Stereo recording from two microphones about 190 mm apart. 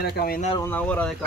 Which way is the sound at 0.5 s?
10° left (ahead or behind).